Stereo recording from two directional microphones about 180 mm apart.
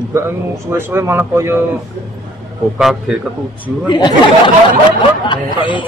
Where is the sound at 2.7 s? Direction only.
5° right (ahead or behind).